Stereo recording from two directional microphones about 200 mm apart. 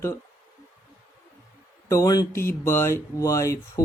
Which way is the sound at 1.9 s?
15° left (ahead or behind).